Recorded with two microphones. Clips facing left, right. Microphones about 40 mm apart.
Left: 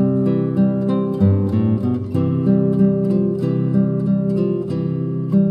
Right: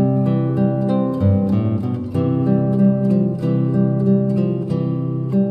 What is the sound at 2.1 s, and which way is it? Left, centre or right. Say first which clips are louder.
Music: right 4 dB; right.